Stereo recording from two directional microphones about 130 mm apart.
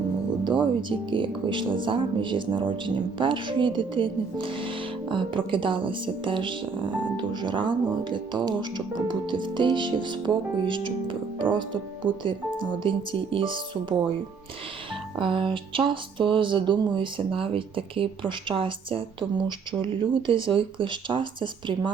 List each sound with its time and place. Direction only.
0.4 s speech: 40° right (ahead or behind)
15.2 s speech: 40° right (ahead or behind)